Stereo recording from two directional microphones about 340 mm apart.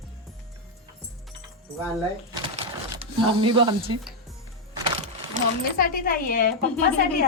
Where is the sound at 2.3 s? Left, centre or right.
Centre.